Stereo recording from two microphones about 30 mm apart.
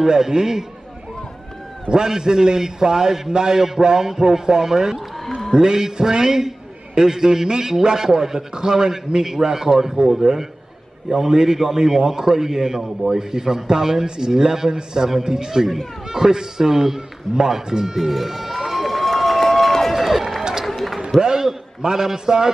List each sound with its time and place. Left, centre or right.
0.0 s a man's voice: right
1.9 s a man's voice: right
17.9 s run: centre
19.9 s run: centre
21.2 s a sound: right
21.8 s a man's voice: right